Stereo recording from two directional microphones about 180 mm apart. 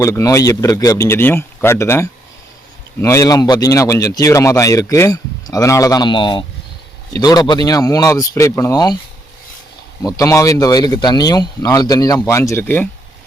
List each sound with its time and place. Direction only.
0.0 s speech: 15° left (ahead or behind)
10.0 s speech: 20° left (ahead or behind)